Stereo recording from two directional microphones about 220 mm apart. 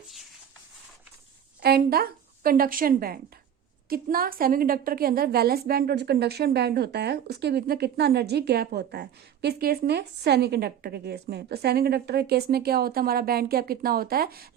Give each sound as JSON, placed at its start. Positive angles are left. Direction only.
{"t": 1.6, "sound": "a woman's voice", "side_deg": -45}